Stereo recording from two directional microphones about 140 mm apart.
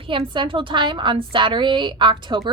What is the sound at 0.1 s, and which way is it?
A woman's voice, 40° right (ahead or behind).